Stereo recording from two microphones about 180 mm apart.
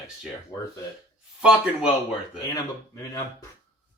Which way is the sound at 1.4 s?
5° right (ahead or behind).